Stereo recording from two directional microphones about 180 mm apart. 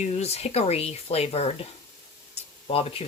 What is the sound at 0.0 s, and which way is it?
Speech, 35° left (ahead or behind).